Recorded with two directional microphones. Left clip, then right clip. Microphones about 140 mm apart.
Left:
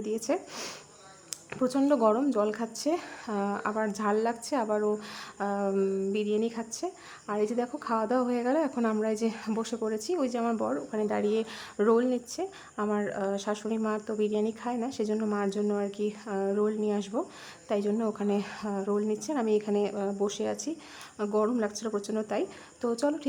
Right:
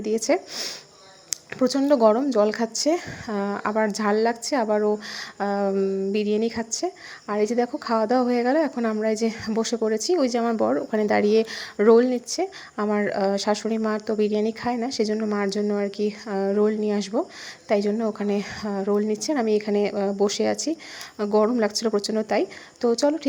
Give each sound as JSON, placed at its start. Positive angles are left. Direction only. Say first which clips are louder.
{"t": 0.0, "sound": "speech", "louder": "right 8 dB", "side_deg": -20}
{"t": 1.3, "sound": "a sound", "louder": "right 7 dB", "side_deg": -20}
{"t": 1.9, "sound": "speech", "louder": "right 8 dB", "side_deg": -20}
{"t": 10.6, "sound": "speech", "louder": "right 8 dB", "side_deg": -35}